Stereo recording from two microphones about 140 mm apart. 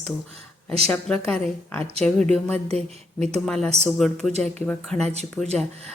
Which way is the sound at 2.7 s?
50° right (ahead or behind).